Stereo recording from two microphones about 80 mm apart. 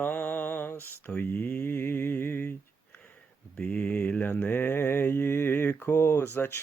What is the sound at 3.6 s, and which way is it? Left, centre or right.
Mantra, centre.